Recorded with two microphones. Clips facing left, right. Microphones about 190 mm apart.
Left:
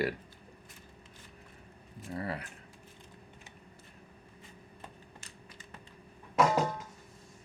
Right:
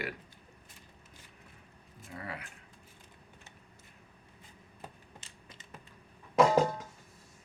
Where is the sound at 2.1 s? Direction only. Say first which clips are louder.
Left 6 dB; 35° left (ahead or behind).